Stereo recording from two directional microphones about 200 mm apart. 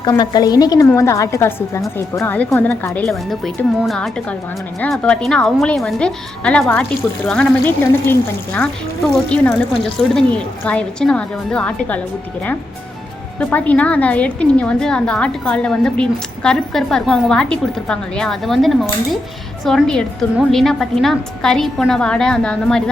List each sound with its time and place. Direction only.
0.0 s a woman's voice: 20° left (ahead or behind)
13.4 s a woman's voice: 5° left (ahead or behind)